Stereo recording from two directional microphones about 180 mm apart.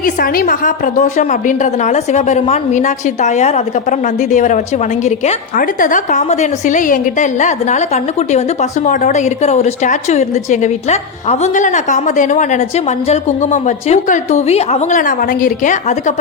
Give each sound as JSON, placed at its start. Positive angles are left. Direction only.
{"t": 0.0, "sound": "a woman's voice", "side_deg": 50}